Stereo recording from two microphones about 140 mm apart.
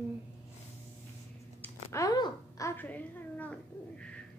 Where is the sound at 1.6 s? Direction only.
20° left (ahead or behind).